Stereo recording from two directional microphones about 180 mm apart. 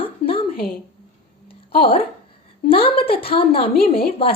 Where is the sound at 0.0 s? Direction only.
30° left (ahead or behind).